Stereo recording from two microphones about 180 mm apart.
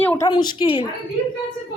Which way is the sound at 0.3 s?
25° left (ahead or behind).